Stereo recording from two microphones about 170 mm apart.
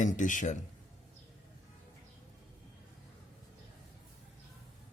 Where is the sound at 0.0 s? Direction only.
50° left (ahead or behind).